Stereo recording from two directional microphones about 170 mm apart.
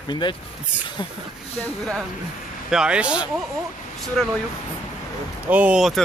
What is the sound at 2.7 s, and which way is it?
Speech, 5° right (ahead or behind).